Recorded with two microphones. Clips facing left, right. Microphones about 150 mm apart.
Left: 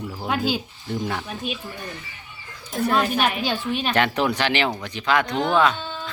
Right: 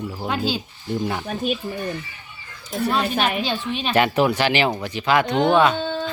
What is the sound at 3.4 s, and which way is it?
A woman's voice, 10° left (ahead or behind).